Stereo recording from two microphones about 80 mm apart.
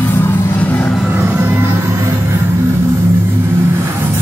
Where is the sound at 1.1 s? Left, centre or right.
Right.